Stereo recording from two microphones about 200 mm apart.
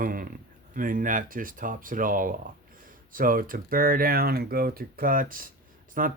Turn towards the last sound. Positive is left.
turn(degrees=-45)  # may be behind; listen again after turning